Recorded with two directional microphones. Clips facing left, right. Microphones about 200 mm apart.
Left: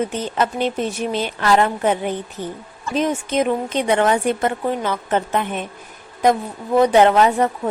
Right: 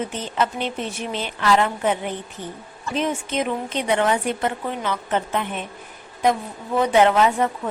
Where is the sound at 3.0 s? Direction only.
40° left (ahead or behind).